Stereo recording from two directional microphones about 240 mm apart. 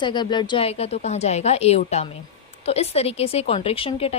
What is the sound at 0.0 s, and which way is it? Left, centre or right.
A woman's voice, centre.